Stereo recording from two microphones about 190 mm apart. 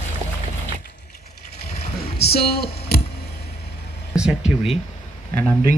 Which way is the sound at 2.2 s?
55° left (ahead or behind).